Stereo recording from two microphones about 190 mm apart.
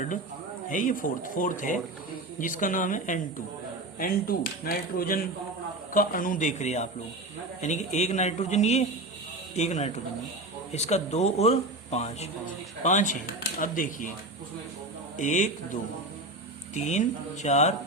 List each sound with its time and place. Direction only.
0.7 s speech: 45° left (ahead or behind)
15.2 s speech: 40° left (ahead or behind)